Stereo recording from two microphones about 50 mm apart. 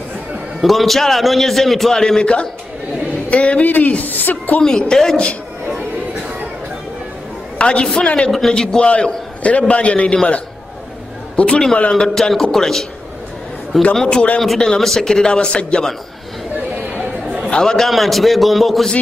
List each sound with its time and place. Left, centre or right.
0.6 s a man's voice: centre; by 3.6 s left
3.6 s a woman's voice: left
4.6 s speech: centre
7.5 s a man's voice: left
8.3 s speech: centre
8.8 s a man's voice: left
11.3 s a man's voice: left
11.9 s speech: centre
14.0 s a man's voice: left
14.6 s speech: centre
17.5 s a man's voice: centre
17.8 s a man's voice: centre